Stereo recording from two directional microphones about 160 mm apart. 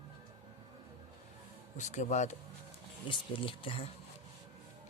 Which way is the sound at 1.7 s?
50° left (ahead or behind).